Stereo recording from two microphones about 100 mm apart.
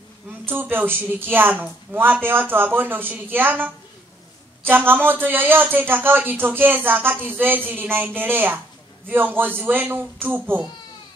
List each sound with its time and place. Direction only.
0.5 s a man's voice: 20° right (ahead or behind)